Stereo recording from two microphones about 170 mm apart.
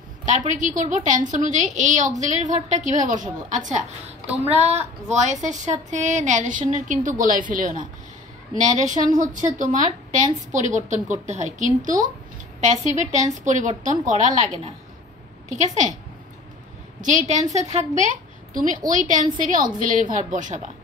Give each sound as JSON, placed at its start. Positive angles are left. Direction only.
{"t": 0.2, "sound": "a woman's voice", "side_deg": -50}
{"t": 5.0, "sound": "a woman's voice", "side_deg": -45}
{"t": 17.0, "sound": "a woman's voice", "side_deg": -50}